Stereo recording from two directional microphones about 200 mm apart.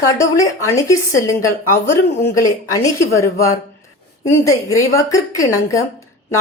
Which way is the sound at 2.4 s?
15° left (ahead or behind).